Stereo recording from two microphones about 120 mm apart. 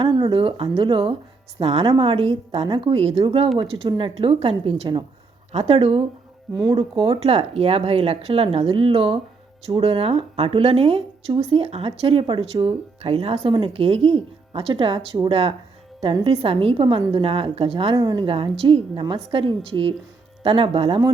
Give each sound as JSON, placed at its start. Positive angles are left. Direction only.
{"t": 0.0, "sound": "speech", "side_deg": -45}
{"t": 17.9, "sound": "speech", "side_deg": -35}